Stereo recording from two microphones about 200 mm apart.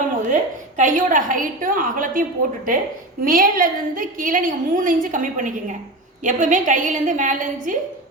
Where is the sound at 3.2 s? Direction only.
45° right (ahead or behind).